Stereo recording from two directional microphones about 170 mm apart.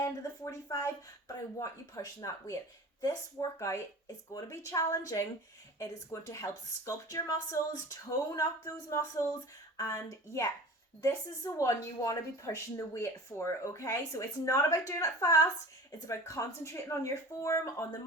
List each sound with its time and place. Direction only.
0.0 s a woman's voice: 20° left (ahead or behind)